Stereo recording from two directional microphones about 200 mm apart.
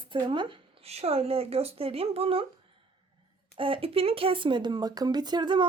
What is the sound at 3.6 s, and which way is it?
Speech, 25° right (ahead or behind).